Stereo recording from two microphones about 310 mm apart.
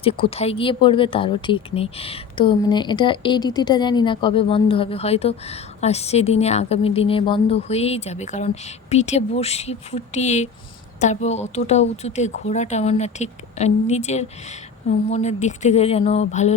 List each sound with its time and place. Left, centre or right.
0.0 s speech: centre